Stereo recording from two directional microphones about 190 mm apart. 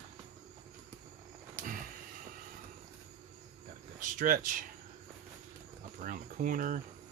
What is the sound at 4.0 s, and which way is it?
Speech, 45° right (ahead or behind).